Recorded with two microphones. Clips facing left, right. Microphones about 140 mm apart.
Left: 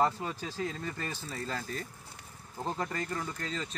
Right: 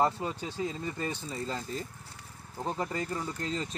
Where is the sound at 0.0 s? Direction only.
20° right (ahead or behind).